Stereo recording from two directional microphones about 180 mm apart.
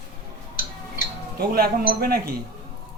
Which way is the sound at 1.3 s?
55° right (ahead or behind).